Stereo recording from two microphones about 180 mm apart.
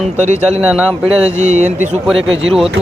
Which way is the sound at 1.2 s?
40° right (ahead or behind).